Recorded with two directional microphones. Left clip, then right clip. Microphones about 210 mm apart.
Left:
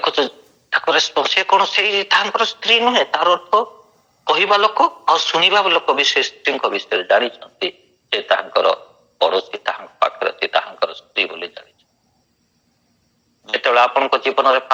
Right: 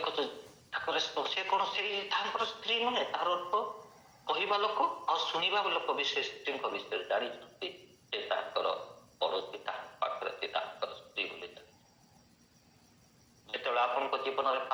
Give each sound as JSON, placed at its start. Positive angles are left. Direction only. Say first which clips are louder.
{"t": 0.7, "sound": "a sound", "louder": "left 18 dB", "side_deg": 45}
{"t": 1.1, "sound": "speech", "louder": "left 17 dB", "side_deg": 45}
{"t": 13.4, "sound": "speech", "louder": "left 17 dB", "side_deg": 45}